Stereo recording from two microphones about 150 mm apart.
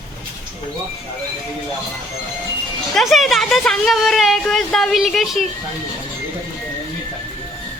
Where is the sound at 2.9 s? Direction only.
Centre (ahead or behind).